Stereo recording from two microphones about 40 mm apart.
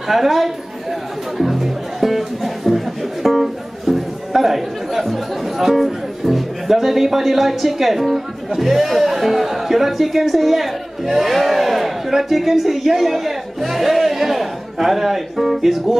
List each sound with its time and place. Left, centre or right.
0.1 s a man's voice: centre
1.4 s music: centre
8.5 s a man's voice: centre